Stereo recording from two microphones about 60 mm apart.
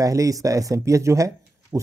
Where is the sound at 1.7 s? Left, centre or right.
Right.